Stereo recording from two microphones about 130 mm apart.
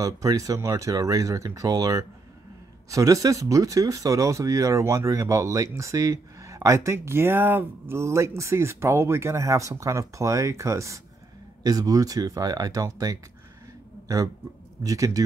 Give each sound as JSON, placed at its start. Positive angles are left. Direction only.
{"t": 0.0, "sound": "a man's voice", "side_deg": -25}